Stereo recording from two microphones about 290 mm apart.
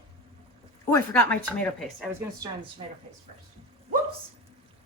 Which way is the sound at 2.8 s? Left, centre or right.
Centre.